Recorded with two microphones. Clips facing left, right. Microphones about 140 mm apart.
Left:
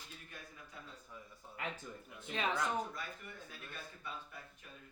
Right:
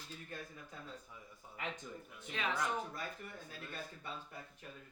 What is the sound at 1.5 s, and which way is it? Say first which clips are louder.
Speech: even; 5° left (ahead or behind).